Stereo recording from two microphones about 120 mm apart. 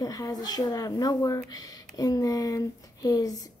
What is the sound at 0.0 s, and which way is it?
Speech, 30° left (ahead or behind).